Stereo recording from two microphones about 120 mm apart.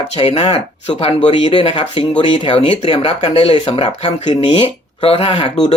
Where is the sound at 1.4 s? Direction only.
50° left (ahead or behind).